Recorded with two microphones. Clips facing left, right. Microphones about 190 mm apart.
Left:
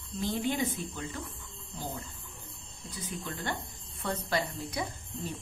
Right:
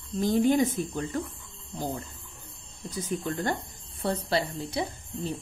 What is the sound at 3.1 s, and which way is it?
Speech, 45° right (ahead or behind).